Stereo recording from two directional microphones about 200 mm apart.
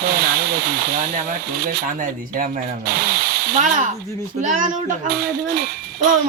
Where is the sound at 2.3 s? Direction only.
50° right (ahead or behind).